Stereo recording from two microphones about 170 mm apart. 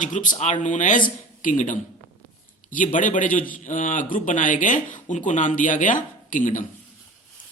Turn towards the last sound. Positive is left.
turn(degrees=50)  # may be behind; listen again after turning